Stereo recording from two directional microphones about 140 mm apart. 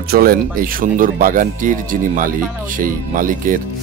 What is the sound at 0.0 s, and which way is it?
Speech, 90° right.